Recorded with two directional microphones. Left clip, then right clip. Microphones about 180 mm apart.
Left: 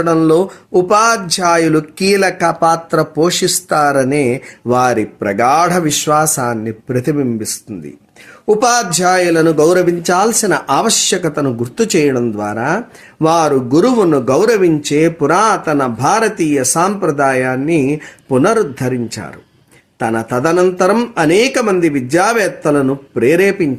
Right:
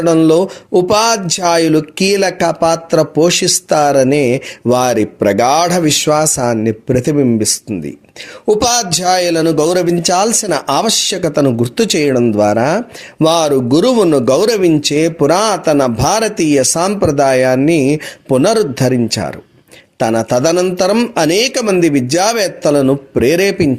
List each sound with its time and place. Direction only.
0.0 s speech: 40° right (ahead or behind)